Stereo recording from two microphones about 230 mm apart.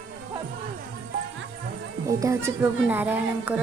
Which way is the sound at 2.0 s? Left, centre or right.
Centre.